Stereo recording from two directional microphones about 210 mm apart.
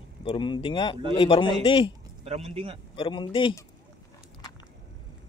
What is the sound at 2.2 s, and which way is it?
Speech, 30° right (ahead or behind).